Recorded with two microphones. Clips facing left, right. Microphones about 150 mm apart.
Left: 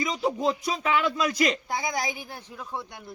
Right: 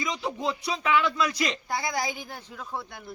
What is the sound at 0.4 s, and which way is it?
A man's voice, 40° left (ahead or behind).